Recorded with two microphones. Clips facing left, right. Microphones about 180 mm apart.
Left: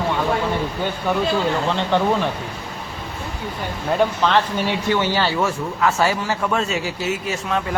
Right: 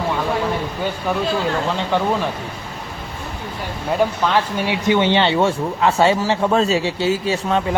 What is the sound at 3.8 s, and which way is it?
Speech, 10° right (ahead or behind).